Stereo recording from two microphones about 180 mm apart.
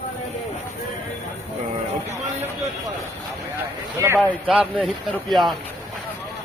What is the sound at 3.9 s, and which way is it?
Speech, 15° right (ahead or behind).